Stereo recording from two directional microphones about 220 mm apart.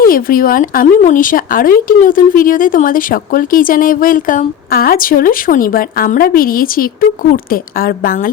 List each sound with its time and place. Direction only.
0.0 s speech: 40° left (ahead or behind)